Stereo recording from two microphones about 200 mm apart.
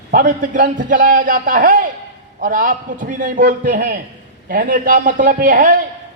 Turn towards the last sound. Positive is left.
turn(degrees=-45)  # may be behind; listen again after turning